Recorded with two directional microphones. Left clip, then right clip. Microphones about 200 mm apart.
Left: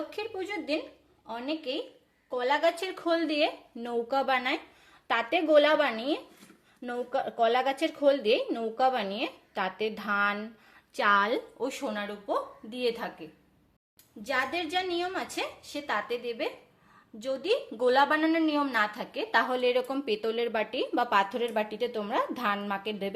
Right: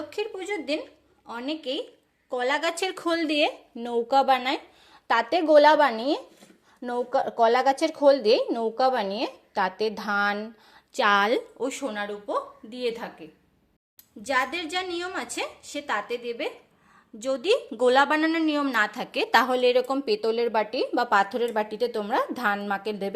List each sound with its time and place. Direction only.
0.1 s a woman's voice: 30° right (ahead or behind)